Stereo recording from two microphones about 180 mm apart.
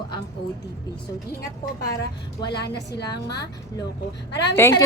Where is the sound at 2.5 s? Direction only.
65° left (ahead or behind).